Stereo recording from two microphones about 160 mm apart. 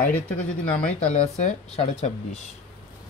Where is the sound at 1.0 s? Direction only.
40° left (ahead or behind).